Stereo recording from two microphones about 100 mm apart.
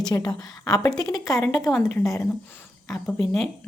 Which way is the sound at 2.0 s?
30° left (ahead or behind).